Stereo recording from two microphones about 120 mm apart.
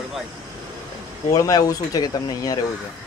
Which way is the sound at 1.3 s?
30° left (ahead or behind).